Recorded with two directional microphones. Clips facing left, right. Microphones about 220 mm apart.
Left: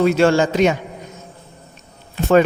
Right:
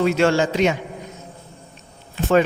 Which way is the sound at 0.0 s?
50° left (ahead or behind).